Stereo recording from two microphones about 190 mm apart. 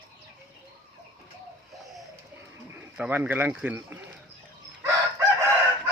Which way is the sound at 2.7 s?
10° right (ahead or behind).